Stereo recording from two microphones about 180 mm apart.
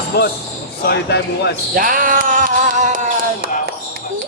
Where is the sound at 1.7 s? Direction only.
50° right (ahead or behind).